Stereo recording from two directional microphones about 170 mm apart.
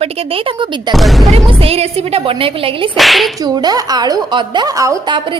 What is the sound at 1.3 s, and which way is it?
Speech, 35° right (ahead or behind).